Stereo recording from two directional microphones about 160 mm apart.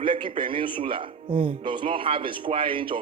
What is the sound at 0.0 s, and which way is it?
Speech, 30° right (ahead or behind).